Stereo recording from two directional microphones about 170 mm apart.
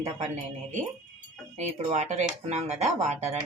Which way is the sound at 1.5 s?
40° right (ahead or behind).